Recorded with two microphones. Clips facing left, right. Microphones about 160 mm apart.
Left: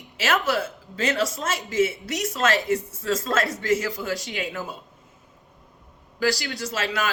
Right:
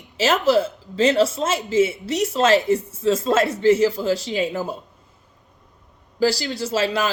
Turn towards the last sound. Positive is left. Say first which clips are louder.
# right 6 dB
turn(degrees=-30)  # may be behind; listen again after turning